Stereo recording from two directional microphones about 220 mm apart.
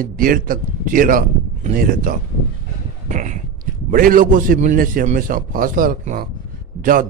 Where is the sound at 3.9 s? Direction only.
40° right (ahead or behind).